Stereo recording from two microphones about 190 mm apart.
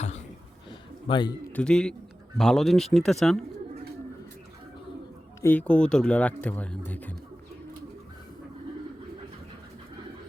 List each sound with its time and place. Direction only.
0.7 s a sound: 25° left (ahead or behind)
1.5 s speech: 5° left (ahead or behind)
5.4 s speech: 10° left (ahead or behind)